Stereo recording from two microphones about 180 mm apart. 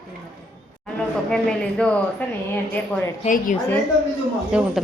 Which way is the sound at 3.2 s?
45° left (ahead or behind).